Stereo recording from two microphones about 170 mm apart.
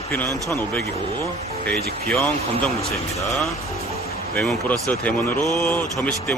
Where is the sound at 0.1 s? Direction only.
15° left (ahead or behind).